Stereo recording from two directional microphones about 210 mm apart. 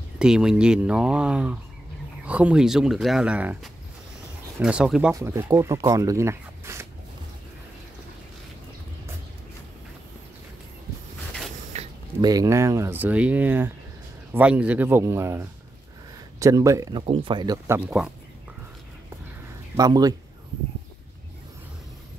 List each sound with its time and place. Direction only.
0.2 s speech: 5° right (ahead or behind)
5.1 s speech: 15° right (ahead or behind)
11.7 s a sound: 30° right (ahead or behind)
12.3 s speech: 15° right (ahead or behind)
17.0 s speech: 25° right (ahead or behind)
17.7 s speech: 5° right (ahead or behind)
19.8 s speech: 20° right (ahead or behind)